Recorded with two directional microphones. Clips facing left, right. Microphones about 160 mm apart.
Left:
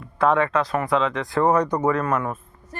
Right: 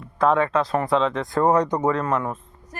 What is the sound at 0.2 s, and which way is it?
Speech, centre (ahead or behind).